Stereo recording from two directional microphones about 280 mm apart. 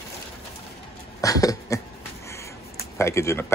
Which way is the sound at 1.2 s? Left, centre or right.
Centre.